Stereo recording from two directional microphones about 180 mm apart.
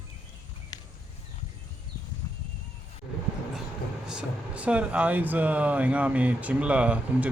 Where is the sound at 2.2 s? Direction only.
20° left (ahead or behind).